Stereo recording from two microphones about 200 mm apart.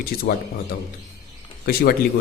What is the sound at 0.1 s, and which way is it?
Speech, 50° left (ahead or behind).